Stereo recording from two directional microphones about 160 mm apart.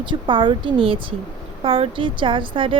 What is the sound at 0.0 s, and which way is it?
Speech, 30° right (ahead or behind).